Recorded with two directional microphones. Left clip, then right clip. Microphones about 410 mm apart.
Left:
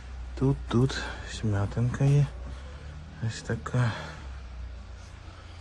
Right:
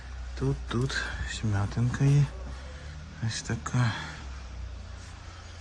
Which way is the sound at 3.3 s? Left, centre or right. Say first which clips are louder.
Even; centre.